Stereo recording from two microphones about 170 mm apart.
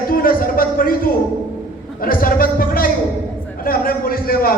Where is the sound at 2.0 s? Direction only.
55° left (ahead or behind).